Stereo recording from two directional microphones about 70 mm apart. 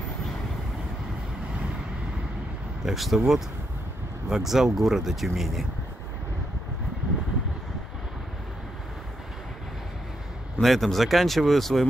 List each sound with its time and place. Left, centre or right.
2.8 s speech: centre
10.6 s speech: centre